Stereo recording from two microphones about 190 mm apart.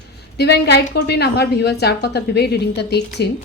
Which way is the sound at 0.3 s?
60° left (ahead or behind).